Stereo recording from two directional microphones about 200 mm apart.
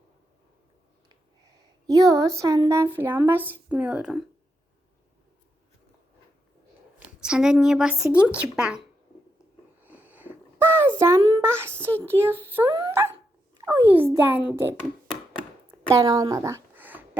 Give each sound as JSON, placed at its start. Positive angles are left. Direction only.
{"t": 1.9, "sound": "a woman's voice", "side_deg": -20}
{"t": 7.2, "sound": "speech", "side_deg": -5}
{"t": 9.8, "sound": "sniff", "side_deg": -10}
{"t": 11.3, "sound": "a woman's voice", "side_deg": -15}
{"t": 16.0, "sound": "speech", "side_deg": -20}